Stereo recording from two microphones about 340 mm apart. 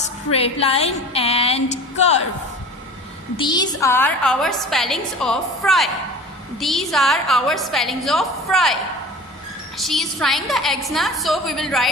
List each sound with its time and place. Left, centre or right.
0.3 s a woman's voice: centre
3.3 s a woman's voice: centre